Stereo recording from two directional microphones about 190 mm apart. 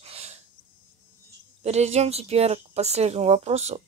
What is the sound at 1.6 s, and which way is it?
Speech, 35° right (ahead or behind).